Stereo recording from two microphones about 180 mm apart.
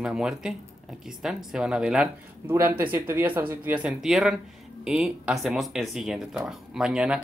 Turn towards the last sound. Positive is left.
turn(degrees=-5)  # may be behind; listen again after turning